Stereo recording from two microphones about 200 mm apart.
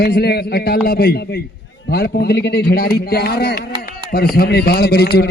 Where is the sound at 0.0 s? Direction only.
55° left (ahead or behind).